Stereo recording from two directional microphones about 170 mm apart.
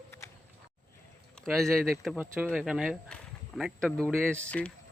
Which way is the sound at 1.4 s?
Centre (ahead or behind).